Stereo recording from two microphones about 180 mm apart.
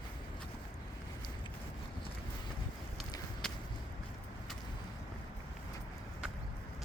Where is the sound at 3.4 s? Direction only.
5° left (ahead or behind).